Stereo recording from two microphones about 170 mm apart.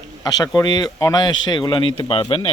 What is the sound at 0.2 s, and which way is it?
Speech, 20° left (ahead or behind).